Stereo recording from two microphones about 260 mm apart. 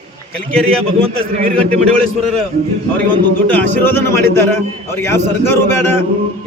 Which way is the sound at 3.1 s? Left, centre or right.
Centre.